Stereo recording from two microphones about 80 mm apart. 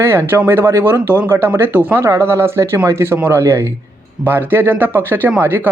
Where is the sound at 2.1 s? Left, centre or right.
Right.